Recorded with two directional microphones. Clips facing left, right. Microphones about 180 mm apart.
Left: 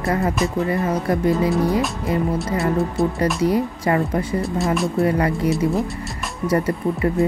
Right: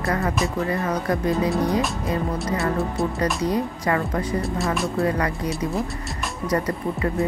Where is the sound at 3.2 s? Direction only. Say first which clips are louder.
Left 4 dB; 30° left (ahead or behind).